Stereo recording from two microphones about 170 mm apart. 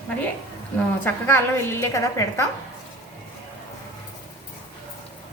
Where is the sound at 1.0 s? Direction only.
15° left (ahead or behind).